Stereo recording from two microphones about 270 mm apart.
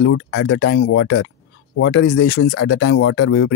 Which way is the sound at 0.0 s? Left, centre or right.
Left.